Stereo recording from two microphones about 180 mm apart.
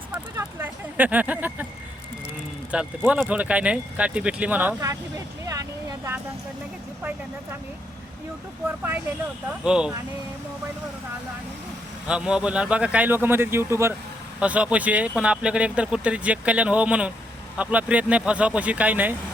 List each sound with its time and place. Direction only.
0.1 s a sound: 10° right (ahead or behind)
2.7 s speech: 5° right (ahead or behind)
4.8 s speech: 20° right (ahead or behind)
9.6 s speech: 5° right (ahead or behind)
12.0 s speech: 5° right (ahead or behind)